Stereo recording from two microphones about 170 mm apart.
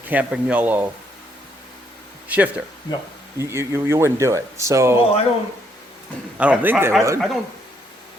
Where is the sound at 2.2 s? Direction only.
10° right (ahead or behind).